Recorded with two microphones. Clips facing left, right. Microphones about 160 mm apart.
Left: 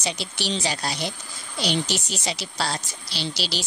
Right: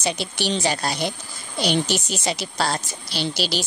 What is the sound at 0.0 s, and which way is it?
Speech, 55° right (ahead or behind).